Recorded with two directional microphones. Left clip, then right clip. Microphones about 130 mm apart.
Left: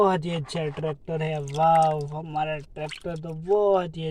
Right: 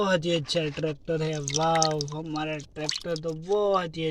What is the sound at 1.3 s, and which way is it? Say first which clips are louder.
Speech: left 7 dB; 5° left (ahead or behind).